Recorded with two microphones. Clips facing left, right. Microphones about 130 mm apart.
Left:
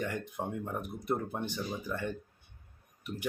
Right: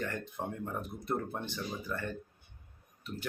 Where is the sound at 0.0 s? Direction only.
15° left (ahead or behind).